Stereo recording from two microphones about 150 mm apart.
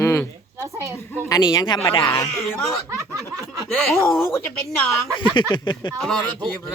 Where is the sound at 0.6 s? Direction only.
20° right (ahead or behind).